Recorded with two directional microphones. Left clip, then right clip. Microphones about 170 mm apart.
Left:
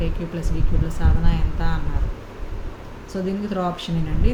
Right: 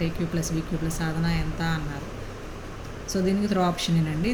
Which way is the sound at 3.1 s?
10° right (ahead or behind).